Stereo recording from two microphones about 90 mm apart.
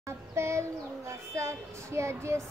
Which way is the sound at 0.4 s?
30° right (ahead or behind).